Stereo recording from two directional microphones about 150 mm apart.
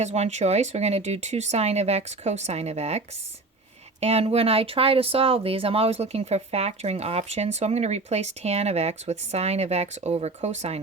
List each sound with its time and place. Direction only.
0.0 s speech: 45° right (ahead or behind)
4.0 s speech: 45° right (ahead or behind)